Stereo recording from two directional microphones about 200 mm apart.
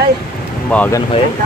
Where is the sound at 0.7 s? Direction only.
5° left (ahead or behind).